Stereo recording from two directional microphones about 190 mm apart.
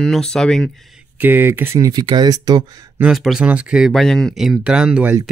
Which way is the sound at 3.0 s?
Centre (ahead or behind).